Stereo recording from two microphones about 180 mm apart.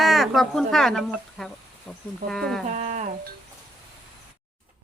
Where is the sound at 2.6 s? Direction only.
40° right (ahead or behind).